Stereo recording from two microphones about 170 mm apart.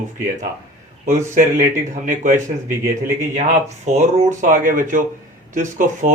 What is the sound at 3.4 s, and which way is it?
Speech, 40° right (ahead or behind).